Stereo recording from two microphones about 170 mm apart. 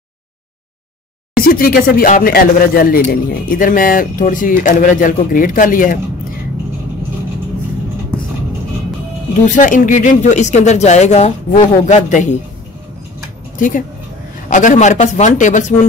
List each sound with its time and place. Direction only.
1.4 s speech: 60° left (ahead or behind)
9.4 s speech: 50° left (ahead or behind)
13.6 s speech: 50° left (ahead or behind)